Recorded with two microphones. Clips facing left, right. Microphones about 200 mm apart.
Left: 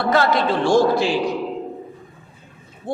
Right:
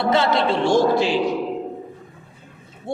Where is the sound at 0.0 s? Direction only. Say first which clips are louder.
Even; 25° right (ahead or behind).